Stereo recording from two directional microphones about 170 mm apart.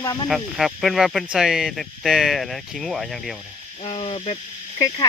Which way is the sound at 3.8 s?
30° left (ahead or behind).